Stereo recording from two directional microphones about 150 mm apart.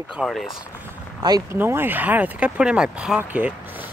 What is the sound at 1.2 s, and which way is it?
Speech, 25° right (ahead or behind).